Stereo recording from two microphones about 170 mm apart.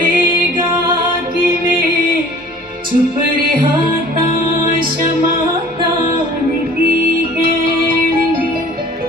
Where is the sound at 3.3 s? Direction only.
60° right (ahead or behind).